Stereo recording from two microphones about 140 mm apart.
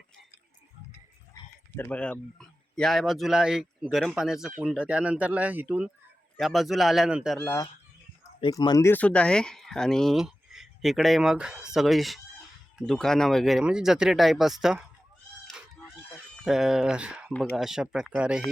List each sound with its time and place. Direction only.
0.9 s speech: 15° left (ahead or behind); by 7.3 s 5° right (ahead or behind)
7.3 s speech: 20° left (ahead or behind)
8.4 s speech: 30° left (ahead or behind)
8.9 s speech: 10° left (ahead or behind)
16.4 s speech: 5° right (ahead or behind)